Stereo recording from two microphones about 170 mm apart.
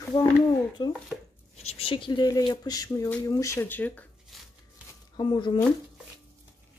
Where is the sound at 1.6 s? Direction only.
35° left (ahead or behind); by 4.1 s 10° left (ahead or behind).